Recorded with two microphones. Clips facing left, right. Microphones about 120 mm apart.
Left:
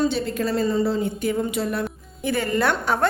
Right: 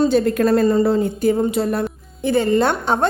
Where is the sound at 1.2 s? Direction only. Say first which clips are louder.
Right 6 dB; 35° right (ahead or behind).